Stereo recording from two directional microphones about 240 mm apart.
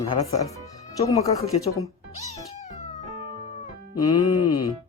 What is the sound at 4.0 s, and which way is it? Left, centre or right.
Speech, centre.